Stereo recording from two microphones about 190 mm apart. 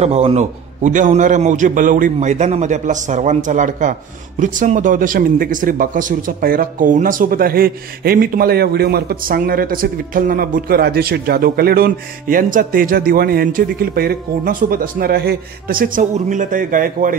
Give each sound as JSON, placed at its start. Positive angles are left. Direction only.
{"t": 0.0, "sound": "a man's voice", "side_deg": -35}